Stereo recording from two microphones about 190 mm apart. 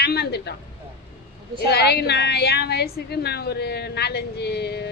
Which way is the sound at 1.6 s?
60° left (ahead or behind).